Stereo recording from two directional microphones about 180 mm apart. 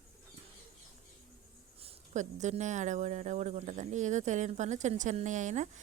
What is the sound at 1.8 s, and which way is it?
Speech, 35° right (ahead or behind).